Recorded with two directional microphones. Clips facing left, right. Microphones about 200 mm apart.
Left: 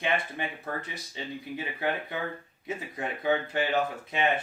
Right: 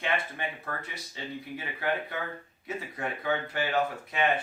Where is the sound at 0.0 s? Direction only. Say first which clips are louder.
Left 2 dB; 20° left (ahead or behind).